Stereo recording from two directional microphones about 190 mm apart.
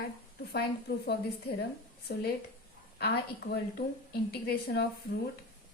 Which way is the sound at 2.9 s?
55° left (ahead or behind).